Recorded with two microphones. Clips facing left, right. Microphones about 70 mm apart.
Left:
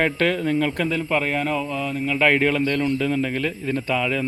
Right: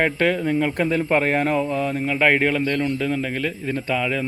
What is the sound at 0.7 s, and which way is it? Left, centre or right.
A man's voice, right.